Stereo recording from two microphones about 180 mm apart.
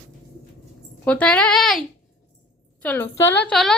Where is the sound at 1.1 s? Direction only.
5° left (ahead or behind).